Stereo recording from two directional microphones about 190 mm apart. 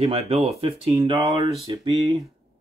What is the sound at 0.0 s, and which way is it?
Speech, 30° right (ahead or behind).